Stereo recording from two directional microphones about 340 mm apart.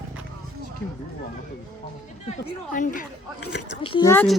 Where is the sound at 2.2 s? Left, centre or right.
Left.